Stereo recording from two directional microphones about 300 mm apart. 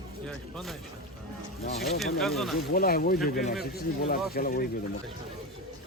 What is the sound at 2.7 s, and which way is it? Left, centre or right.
A man's voice, left.